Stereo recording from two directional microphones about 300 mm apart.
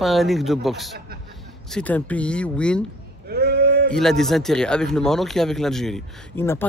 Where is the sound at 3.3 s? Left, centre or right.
Right.